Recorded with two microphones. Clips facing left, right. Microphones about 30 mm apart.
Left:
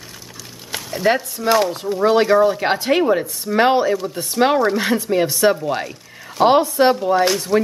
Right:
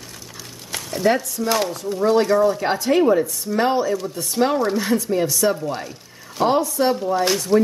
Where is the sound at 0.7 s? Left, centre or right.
Centre.